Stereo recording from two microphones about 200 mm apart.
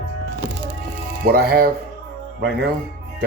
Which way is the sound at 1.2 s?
50° right (ahead or behind).